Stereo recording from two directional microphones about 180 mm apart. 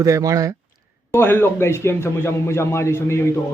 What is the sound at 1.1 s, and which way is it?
A man's voice, 15° left (ahead or behind).